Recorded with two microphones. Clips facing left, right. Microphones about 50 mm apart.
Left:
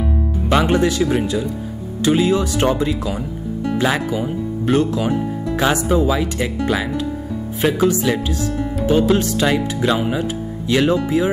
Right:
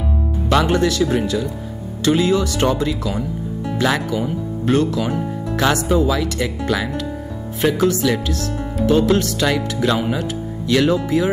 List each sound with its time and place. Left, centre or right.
0.5 s speech: centre